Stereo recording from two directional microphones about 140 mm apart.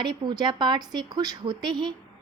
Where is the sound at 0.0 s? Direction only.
30° right (ahead or behind).